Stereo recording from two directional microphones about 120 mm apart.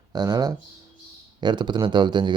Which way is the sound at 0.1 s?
35° right (ahead or behind).